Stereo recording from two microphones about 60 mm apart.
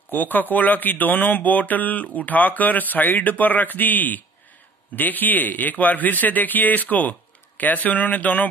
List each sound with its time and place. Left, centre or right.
0.1 s speech: left